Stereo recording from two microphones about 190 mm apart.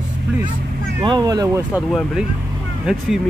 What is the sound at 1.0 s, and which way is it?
Speech, 20° right (ahead or behind).